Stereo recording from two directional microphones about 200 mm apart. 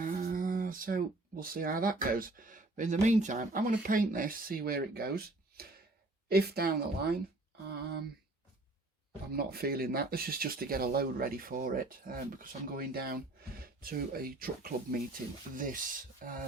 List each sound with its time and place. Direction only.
0.0 s speech: 40° right (ahead or behind)
9.3 s speech: 50° right (ahead or behind)